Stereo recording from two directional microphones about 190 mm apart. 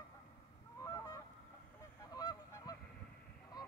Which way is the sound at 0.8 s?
20° left (ahead or behind).